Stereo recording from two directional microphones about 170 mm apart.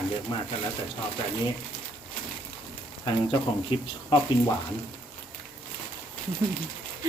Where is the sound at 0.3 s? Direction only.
30° left (ahead or behind).